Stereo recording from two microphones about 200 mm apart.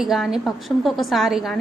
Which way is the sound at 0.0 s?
Centre (ahead or behind).